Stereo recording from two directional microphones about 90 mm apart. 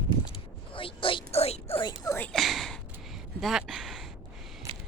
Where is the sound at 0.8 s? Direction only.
80° left.